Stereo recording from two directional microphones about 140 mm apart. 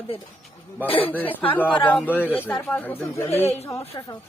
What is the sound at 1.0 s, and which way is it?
Speech, 10° left (ahead or behind).